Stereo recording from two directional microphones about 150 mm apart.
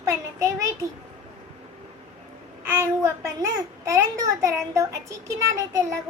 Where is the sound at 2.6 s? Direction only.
20° right (ahead or behind).